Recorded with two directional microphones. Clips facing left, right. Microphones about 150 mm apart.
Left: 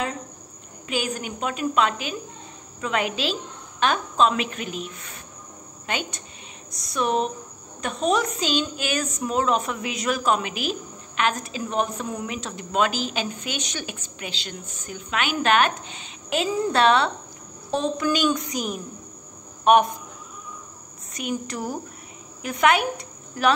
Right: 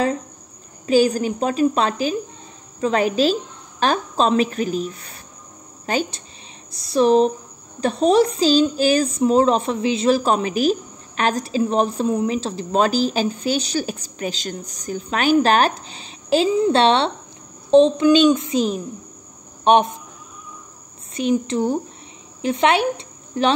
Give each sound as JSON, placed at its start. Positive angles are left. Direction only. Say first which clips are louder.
{"t": 0.8, "sound": "speech", "louder": "right 12 dB", "side_deg": -35}
{"t": 6.7, "sound": "a sound", "louder": "right 9 dB", "side_deg": -30}
{"t": 7.8, "sound": "a child's voice", "louder": "right 8 dB", "side_deg": -35}
{"t": 21.1, "sound": "a child's voice", "louder": "right 9 dB", "side_deg": -30}